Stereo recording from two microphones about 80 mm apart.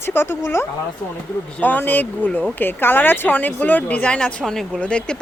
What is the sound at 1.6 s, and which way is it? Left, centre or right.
Speech, left.